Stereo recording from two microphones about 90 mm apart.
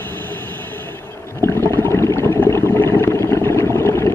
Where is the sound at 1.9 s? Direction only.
30° left (ahead or behind).